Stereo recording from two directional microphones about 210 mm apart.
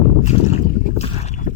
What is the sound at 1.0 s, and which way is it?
Boat, 30° left (ahead or behind).